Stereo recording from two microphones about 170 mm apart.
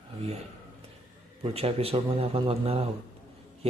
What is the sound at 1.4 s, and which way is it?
A man's voice, 35° right (ahead or behind).